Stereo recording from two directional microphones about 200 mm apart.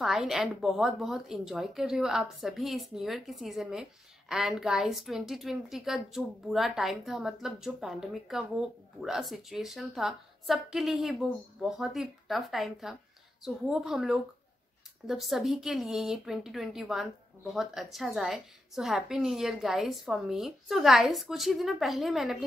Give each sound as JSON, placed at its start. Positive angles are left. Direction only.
{"t": 0.0, "sound": "a woman's voice", "side_deg": 0}